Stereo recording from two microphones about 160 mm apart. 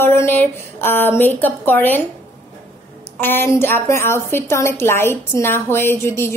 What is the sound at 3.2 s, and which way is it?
A woman's voice, 15° left (ahead or behind).